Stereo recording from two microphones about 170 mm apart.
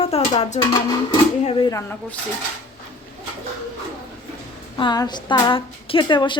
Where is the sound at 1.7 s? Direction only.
10° left (ahead or behind).